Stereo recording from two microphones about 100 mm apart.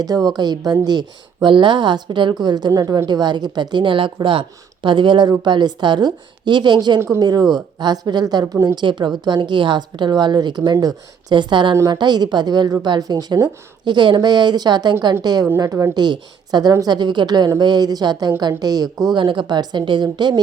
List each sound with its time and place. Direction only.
0.0 s speech: 40° right (ahead or behind)
19.1 s speech: 55° right (ahead or behind)